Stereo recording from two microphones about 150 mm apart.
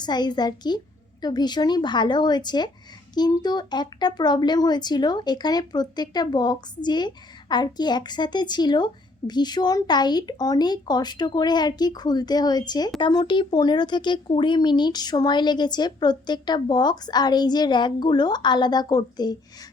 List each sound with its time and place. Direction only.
0.0 s speech: 30° left (ahead or behind)